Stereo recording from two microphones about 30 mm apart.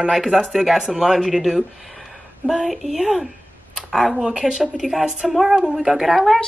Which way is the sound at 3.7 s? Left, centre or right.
Centre.